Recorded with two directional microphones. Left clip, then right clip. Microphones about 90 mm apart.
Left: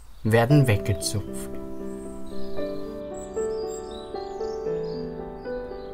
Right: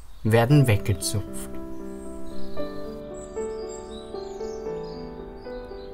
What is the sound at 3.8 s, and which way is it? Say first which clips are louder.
Music: left 2 dB; 20° left (ahead or behind).